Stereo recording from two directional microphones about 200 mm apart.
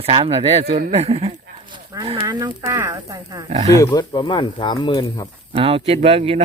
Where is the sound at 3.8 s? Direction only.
20° left (ahead or behind).